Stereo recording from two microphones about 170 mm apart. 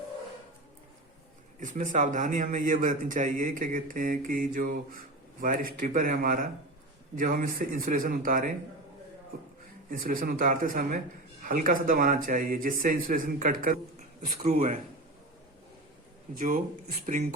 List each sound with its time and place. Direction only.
1.5 s a man's voice: 50° right (ahead or behind)
9.9 s a man's voice: 55° right (ahead or behind)
16.3 s a man's voice: 50° right (ahead or behind)